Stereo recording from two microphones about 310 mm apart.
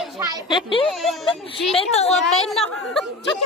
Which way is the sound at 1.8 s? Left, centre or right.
Centre.